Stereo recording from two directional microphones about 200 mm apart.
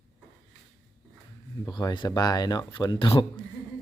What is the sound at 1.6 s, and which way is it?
Speech, 20° left (ahead or behind).